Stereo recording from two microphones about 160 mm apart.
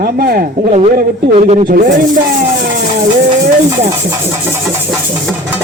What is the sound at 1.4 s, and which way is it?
Speech, 40° right (ahead or behind).